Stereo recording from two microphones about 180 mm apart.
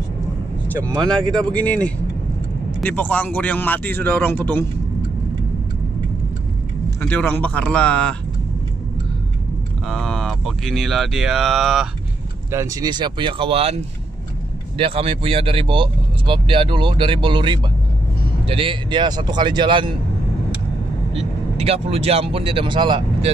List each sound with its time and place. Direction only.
1.0 s speech: 5° left (ahead or behind)
7.0 s speech: 10° left (ahead or behind)
9.8 s speech: centre (ahead or behind)
12.4 s speech: 15° right (ahead or behind); by 13.7 s 30° right (ahead or behind)
14.8 s speech: 30° right (ahead or behind)
21.2 s speech: 35° right (ahead or behind)